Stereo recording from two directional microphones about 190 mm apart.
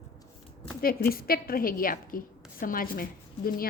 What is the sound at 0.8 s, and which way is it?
A woman's voice, 50° left (ahead or behind).